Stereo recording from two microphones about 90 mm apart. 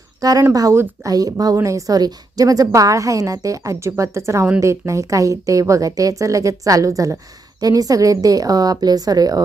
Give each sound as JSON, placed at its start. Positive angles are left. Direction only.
{"t": 0.2, "sound": "a woman's voice", "side_deg": -40}